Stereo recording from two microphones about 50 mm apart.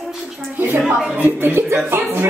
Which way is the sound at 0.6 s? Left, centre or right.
Right.